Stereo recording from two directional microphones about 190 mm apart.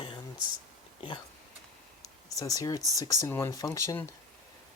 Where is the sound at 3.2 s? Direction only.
15° left (ahead or behind).